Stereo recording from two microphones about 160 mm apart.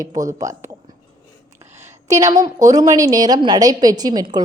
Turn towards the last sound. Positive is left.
turn(degrees=-25)  # may be behind; listen again after turning